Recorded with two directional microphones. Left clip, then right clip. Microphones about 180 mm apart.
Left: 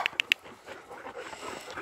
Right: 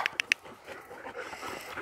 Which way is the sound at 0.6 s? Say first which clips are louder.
Even; 25° right (ahead or behind).